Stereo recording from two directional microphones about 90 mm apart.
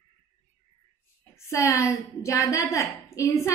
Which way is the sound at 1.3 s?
35° left (ahead or behind).